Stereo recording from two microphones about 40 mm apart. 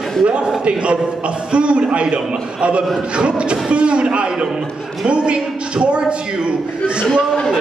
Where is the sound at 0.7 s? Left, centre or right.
Right.